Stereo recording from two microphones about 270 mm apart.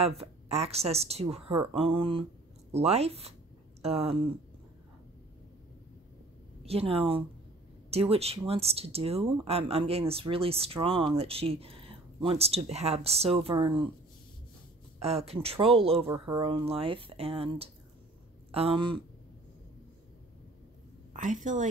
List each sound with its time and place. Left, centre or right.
0.0 s speech: right
6.6 s speech: right
15.0 s speech: right
21.1 s a sound: right